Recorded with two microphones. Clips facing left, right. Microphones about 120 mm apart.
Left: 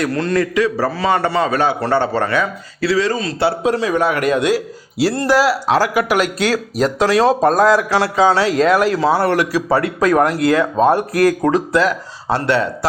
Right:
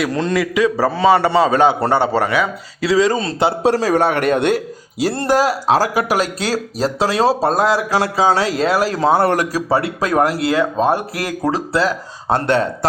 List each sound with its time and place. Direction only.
0.1 s a man's voice: 20° right (ahead or behind)
3.2 s speech: 30° right (ahead or behind)
4.3 s speech: 60° right (ahead or behind)
5.2 s speech: 45° right (ahead or behind)
9.6 s speech: 30° right (ahead or behind)
12.3 s speech: 45° right (ahead or behind)